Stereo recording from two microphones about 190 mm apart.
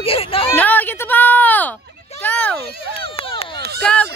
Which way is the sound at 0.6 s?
10° left (ahead or behind).